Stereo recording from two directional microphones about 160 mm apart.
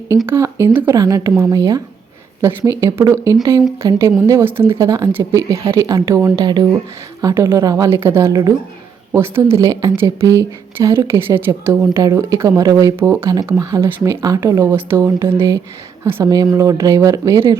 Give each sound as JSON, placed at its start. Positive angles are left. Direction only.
{"t": 0.3, "sound": "speech", "side_deg": -15}